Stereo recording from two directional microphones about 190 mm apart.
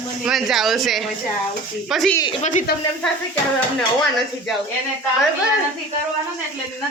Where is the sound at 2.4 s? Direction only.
40° left (ahead or behind).